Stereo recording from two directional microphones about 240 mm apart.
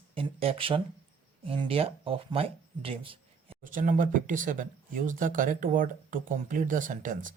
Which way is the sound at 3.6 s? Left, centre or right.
Right.